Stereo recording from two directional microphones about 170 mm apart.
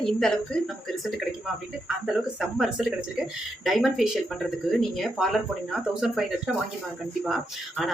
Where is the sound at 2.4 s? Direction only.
Centre (ahead or behind).